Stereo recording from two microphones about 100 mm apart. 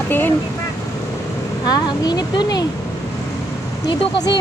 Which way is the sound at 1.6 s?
45° left (ahead or behind).